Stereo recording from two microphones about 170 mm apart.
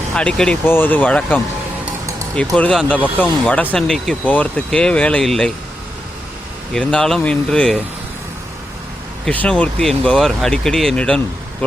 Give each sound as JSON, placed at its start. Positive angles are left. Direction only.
{"t": 0.1, "sound": "speech", "side_deg": 5}
{"t": 6.7, "sound": "speech", "side_deg": 5}
{"t": 9.2, "sound": "speech", "side_deg": 10}